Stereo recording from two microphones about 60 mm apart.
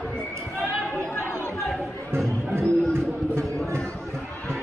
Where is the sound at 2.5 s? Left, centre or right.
Right.